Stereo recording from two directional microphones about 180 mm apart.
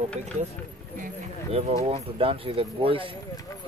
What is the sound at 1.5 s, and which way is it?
Speech, 35° right (ahead or behind).